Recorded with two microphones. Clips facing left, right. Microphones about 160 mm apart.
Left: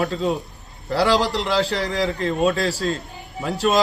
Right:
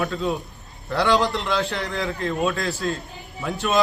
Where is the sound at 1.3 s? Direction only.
35° left (ahead or behind).